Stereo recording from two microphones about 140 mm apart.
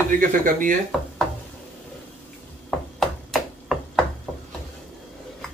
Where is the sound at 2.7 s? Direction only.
Centre (ahead or behind).